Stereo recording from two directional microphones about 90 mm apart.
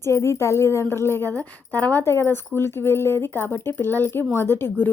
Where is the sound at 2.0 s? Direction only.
30° left (ahead or behind).